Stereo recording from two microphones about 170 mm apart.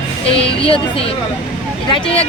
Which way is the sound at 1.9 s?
30° left (ahead or behind).